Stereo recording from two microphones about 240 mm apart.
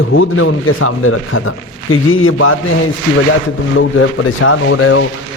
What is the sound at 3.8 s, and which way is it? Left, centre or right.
A man's voice, left.